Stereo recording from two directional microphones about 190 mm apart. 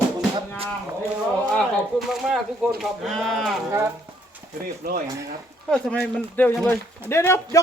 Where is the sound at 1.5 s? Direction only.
Centre (ahead or behind).